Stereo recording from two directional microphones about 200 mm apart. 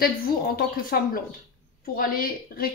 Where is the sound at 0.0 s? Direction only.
45° left (ahead or behind).